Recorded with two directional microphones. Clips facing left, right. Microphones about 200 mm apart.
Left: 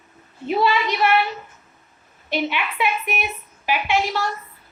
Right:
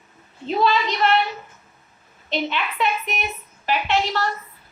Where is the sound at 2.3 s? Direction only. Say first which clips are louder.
Left 1 dB; 10° left (ahead or behind).